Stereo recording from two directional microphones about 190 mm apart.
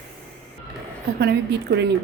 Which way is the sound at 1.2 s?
60° right (ahead or behind).